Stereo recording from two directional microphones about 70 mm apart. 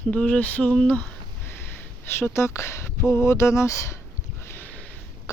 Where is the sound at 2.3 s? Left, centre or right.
Left.